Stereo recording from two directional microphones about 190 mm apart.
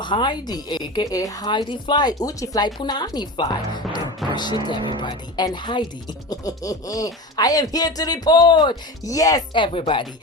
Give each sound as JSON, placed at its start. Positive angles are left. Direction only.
{"t": 0.0, "sound": "a woman's voice", "side_deg": 25}